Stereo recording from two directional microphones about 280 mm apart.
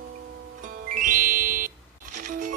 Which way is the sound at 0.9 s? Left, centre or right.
Right.